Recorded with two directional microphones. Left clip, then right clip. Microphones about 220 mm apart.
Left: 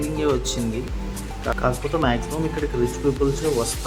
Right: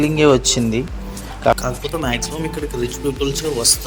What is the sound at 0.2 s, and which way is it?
Speech, 30° right (ahead or behind).